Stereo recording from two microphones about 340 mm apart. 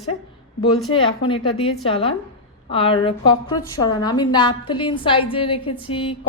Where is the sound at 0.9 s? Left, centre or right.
Centre.